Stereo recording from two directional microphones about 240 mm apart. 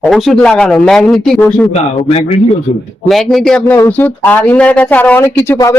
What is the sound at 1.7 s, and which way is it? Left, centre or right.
Speech, left.